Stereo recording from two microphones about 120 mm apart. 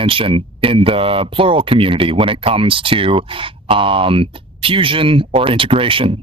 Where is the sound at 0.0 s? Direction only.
50° right (ahead or behind).